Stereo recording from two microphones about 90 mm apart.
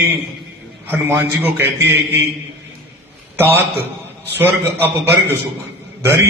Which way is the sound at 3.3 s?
25° right (ahead or behind).